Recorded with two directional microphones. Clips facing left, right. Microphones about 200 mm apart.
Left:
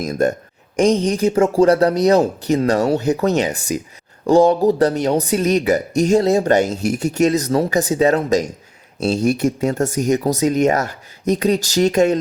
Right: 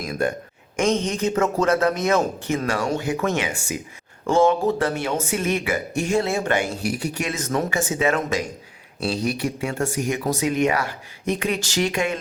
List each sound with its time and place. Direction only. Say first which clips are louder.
0.0 s speech: left 6 dB; 40° left (ahead or behind)
0.9 s speech: left 5 dB; 15° left (ahead or behind)
1.1 s speech: left 6 dB; 30° left (ahead or behind)